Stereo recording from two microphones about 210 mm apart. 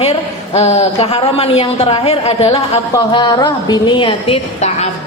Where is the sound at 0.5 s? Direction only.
30° left (ahead or behind).